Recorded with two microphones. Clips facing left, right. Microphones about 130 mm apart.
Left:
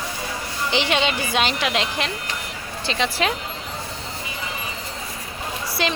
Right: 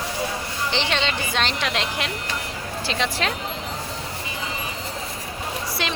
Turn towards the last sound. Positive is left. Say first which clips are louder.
# left 4 dB
turn(degrees=0)  # may be behind; listen again after turning